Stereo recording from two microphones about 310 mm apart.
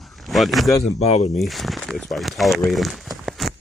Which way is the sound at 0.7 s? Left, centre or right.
Centre.